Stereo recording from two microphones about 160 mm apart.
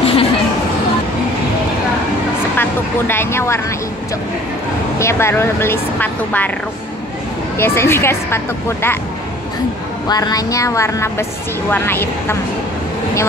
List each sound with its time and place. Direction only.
0.0 s a sound: 35° left (ahead or behind)
2.5 s speech: 15° left (ahead or behind)
4.9 s speech: 15° left (ahead or behind)
7.5 s speech: 15° left (ahead or behind)
10.0 s a woman's voice: 25° left (ahead or behind)